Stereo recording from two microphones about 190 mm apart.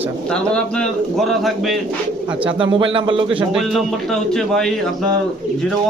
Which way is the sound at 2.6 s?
25° right (ahead or behind).